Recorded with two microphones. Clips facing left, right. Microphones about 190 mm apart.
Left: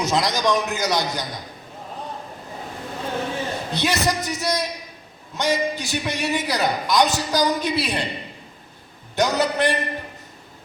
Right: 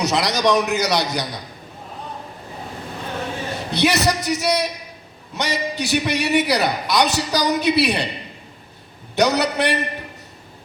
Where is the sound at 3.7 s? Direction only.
70° right (ahead or behind).